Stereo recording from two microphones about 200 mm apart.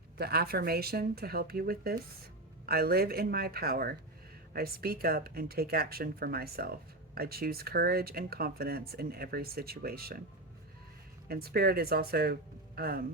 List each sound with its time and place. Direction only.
0.2 s speech: 50° right (ahead or behind)
11.3 s speech: 50° right (ahead or behind)